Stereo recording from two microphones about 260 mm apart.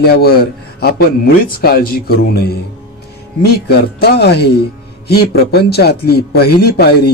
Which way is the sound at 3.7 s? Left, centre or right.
Left.